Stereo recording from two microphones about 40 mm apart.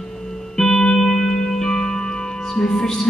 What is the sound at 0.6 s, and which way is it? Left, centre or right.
Music, centre.